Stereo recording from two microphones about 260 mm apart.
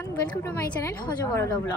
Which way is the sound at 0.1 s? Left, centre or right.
Centre.